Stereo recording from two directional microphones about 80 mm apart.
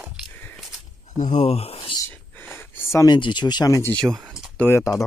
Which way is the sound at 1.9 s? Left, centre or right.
Left.